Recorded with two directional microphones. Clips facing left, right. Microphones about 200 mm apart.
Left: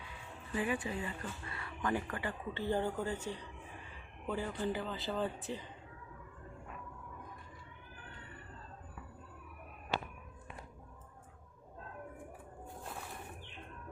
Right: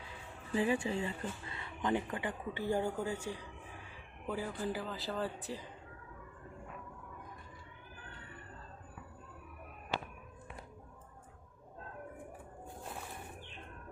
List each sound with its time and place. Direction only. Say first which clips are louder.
0.5 s speech: right 4 dB; 30° right (ahead or behind); by 5.6 s centre (ahead or behind)